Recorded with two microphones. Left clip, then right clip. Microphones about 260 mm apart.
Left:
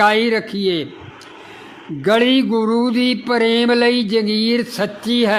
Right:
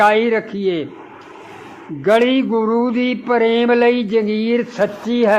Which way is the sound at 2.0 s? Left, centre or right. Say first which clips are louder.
Right 1 dB; left.